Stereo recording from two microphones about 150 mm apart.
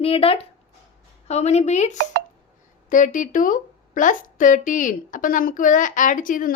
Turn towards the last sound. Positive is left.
turn(degrees=65)  # may be behind; listen again after turning